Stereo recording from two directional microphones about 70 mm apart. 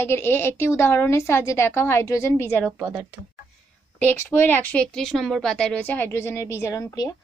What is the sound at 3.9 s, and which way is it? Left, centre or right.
Speech, left.